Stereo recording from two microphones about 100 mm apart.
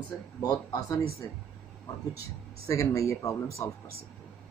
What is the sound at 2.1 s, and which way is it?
Speech, 35° left (ahead or behind).